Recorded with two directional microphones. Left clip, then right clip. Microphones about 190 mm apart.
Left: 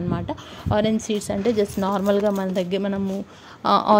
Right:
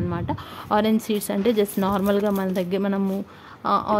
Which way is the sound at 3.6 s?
15° left (ahead or behind).